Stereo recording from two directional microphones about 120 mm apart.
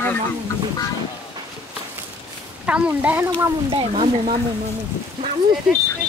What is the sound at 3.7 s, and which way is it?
Speech, 50° right (ahead or behind).